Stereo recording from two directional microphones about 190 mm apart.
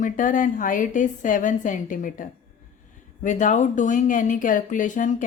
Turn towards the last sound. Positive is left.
turn(degrees=40)  # may be behind; listen again after turning